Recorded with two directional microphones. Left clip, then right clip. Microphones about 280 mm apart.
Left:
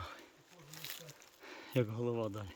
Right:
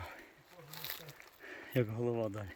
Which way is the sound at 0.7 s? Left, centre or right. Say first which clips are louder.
Right 2 dB; right.